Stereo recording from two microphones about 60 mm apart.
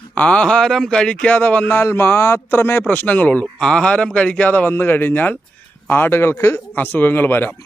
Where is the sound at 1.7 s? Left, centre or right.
Left.